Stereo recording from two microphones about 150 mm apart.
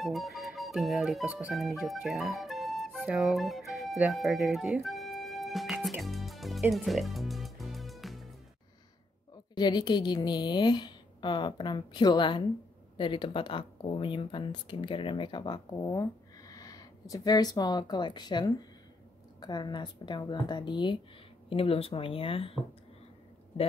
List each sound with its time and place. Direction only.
0.0 s speech: centre (ahead or behind)
1.9 s flute: centre (ahead or behind)
6.7 s music: centre (ahead or behind)
9.6 s a woman's voice: 30° left (ahead or behind)